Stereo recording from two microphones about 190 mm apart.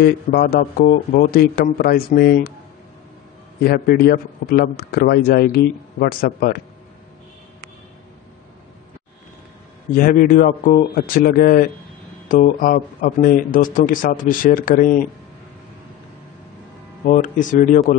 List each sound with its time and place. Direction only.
0.0 s a man's voice: 55° left (ahead or behind)
3.6 s a man's voice: 50° left (ahead or behind)
9.9 s a man's voice: 50° left (ahead or behind)
17.0 s a man's voice: 45° left (ahead or behind)